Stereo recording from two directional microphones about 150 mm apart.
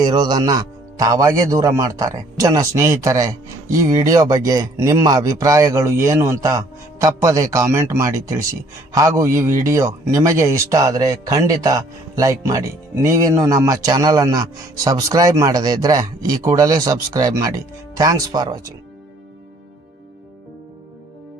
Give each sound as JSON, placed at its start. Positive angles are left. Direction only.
{"t": 0.0, "sound": "a man's voice", "side_deg": -25}